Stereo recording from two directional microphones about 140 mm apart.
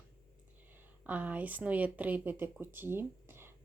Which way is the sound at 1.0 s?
10° right (ahead or behind).